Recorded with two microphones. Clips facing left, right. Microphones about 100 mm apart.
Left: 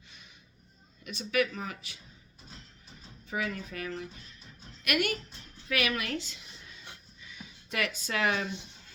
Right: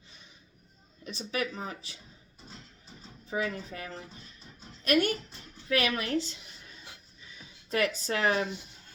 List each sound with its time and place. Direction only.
1.0 s speech: 30° right (ahead or behind)
3.2 s a woman's voice: 35° right (ahead or behind)
7.7 s speech: 35° right (ahead or behind)